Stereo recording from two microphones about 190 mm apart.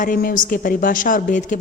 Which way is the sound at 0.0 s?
45° left (ahead or behind).